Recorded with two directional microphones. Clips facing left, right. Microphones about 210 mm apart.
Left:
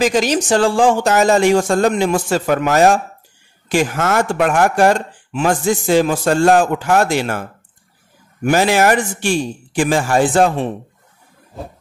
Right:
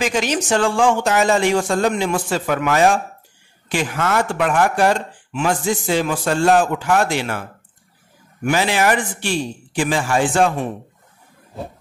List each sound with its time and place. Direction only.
0.0 s a man's voice: 40° left (ahead or behind)
8.5 s speech: 45° left (ahead or behind)